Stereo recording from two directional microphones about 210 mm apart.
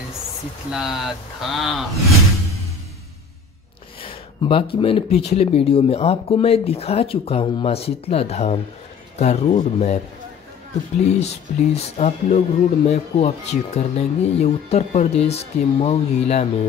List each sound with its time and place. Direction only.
0.7 s speech: centre (ahead or behind)
4.0 s speech: 25° left (ahead or behind)
11.1 s speech: 30° left (ahead or behind)